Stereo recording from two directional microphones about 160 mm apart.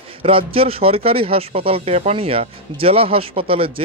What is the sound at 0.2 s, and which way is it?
Speech, 35° right (ahead or behind).